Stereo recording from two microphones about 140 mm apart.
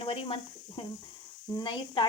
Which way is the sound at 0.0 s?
40° left (ahead or behind).